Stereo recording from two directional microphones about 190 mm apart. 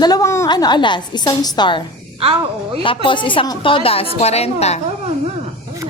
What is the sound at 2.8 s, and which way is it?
A woman's voice, 25° left (ahead or behind).